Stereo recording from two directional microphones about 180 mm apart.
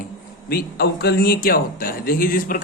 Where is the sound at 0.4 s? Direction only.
60° left (ahead or behind).